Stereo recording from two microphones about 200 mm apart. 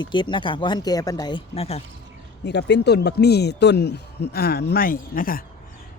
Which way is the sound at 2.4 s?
55° left (ahead or behind).